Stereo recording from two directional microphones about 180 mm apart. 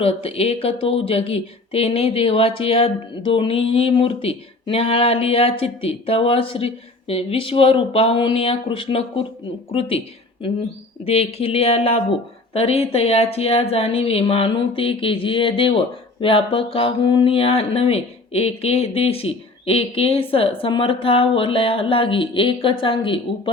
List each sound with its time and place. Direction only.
0.0 s speech: 35° left (ahead or behind)